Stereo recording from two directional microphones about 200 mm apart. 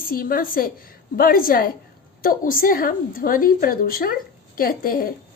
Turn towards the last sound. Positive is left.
turn(degrees=45)  # may be behind; listen again after turning